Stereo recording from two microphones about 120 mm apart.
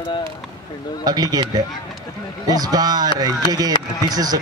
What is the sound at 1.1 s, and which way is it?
Speech, 30° right (ahead or behind).